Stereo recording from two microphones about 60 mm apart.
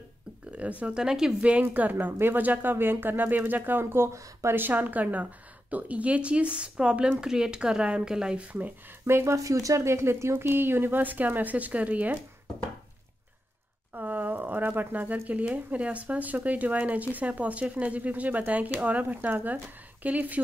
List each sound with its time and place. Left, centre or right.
0.5 s speech: right
0.9 s speech: centre; by 3.8 s right
3.8 s speech: right
4.6 s speech: right; by 8.5 s centre
9.0 s speech: right
13.9 s speech: right